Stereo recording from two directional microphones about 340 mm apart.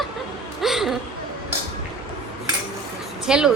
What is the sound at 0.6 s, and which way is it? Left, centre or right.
Laughter, centre.